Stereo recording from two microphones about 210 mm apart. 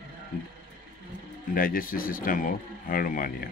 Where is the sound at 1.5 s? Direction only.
40° left (ahead or behind).